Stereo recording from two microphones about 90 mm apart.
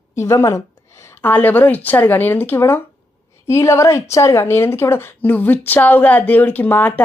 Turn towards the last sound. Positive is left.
turn(degrees=20)  # may be behind; listen again after turning